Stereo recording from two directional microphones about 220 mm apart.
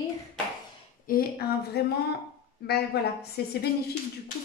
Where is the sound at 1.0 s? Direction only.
45° left (ahead or behind).